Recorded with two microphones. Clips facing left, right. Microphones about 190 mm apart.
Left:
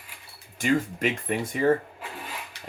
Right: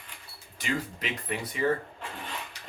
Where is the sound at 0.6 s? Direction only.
50° left (ahead or behind).